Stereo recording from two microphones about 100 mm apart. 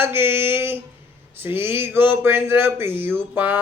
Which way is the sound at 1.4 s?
20° right (ahead or behind).